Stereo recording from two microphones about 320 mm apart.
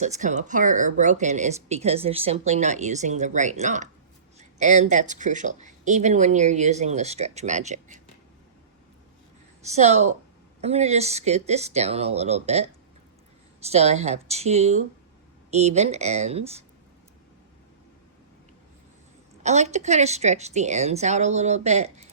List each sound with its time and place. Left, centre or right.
0.0 s speech: right
9.7 s speech: right
19.4 s speech: right